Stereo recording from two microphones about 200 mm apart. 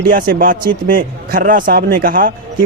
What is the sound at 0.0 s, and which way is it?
Speech, 45° right (ahead or behind).